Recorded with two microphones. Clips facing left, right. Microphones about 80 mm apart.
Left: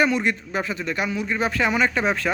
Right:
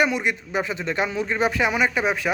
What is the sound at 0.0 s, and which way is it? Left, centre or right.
Speech, centre.